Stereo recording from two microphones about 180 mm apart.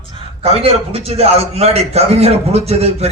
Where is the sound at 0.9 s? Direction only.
35° right (ahead or behind).